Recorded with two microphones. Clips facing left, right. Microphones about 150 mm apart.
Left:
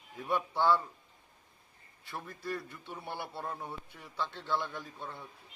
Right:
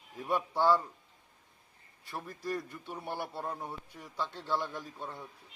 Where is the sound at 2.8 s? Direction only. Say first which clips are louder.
Right 3 dB; 10° right (ahead or behind).